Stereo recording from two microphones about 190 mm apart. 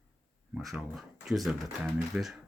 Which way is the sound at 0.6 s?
Centre (ahead or behind).